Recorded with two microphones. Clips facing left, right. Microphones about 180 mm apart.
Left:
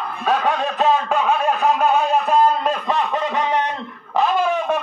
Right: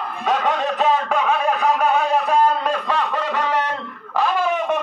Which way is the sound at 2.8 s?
20° left (ahead or behind).